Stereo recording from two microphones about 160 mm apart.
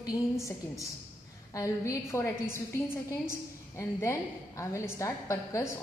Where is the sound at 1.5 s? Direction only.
20° left (ahead or behind).